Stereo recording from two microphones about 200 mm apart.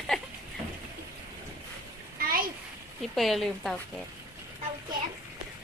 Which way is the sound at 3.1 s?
Centre (ahead or behind).